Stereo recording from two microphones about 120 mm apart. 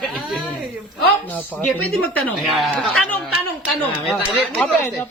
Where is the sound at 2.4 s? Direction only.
Centre (ahead or behind).